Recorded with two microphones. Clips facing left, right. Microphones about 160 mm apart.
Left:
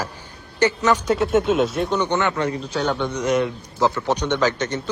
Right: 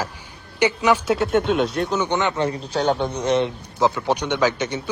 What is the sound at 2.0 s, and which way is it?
Speech, 15° right (ahead or behind).